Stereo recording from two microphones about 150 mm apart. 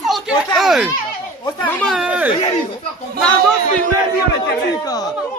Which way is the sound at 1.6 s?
10° left (ahead or behind).